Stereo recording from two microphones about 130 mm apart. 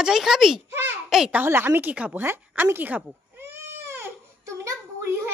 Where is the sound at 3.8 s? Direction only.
20° right (ahead or behind).